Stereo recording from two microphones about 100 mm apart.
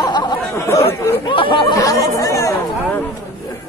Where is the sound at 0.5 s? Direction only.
30° left (ahead or behind).